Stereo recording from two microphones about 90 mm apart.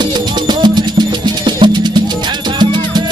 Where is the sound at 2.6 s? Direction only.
55° right (ahead or behind).